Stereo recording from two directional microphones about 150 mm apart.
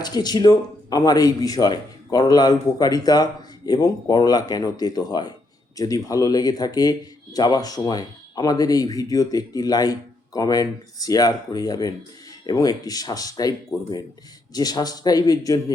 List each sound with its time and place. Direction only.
0.0 s speech: 25° left (ahead or behind)